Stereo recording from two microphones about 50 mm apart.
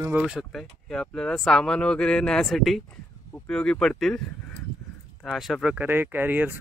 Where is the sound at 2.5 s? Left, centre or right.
Centre.